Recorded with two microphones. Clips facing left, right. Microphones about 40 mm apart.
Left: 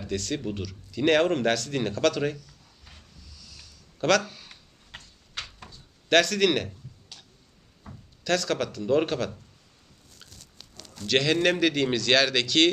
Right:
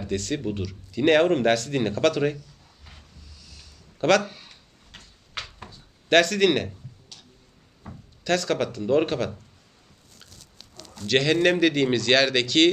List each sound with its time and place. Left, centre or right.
0.0 s speech: centre
4.2 s speech: right
4.9 s tick-tock: left
5.6 s a sound: centre
7.9 s speech: centre
10.9 s speech: centre